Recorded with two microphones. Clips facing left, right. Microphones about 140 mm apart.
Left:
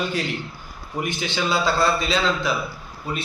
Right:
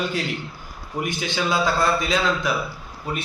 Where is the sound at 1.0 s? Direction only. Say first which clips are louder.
Even; centre (ahead or behind).